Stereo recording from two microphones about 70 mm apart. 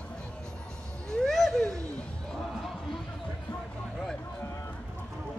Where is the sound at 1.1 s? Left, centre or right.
Centre.